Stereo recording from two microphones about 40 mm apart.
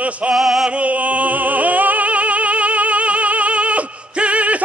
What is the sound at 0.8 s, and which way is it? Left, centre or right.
Music, right.